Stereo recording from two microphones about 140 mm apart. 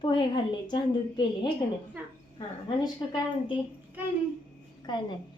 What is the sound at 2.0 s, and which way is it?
Speech, 10° right (ahead or behind).